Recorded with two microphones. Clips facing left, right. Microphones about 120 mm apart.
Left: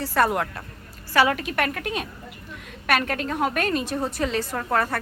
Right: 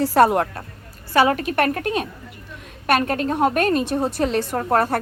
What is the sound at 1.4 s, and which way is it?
Speech, 45° right (ahead or behind).